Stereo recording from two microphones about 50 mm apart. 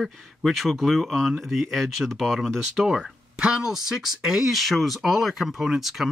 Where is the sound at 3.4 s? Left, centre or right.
Centre.